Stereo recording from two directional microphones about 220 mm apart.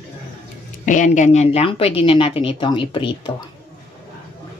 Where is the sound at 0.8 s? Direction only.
35° left (ahead or behind).